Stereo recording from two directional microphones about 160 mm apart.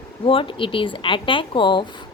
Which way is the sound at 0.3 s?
35° left (ahead or behind).